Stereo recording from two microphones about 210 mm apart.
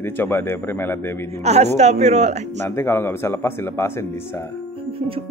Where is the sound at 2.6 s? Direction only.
10° left (ahead or behind).